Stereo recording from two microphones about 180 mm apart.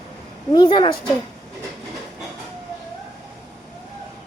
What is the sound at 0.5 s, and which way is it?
Speech, 25° left (ahead or behind).